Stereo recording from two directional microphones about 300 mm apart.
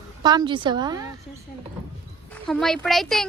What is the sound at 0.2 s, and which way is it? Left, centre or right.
Speech, centre.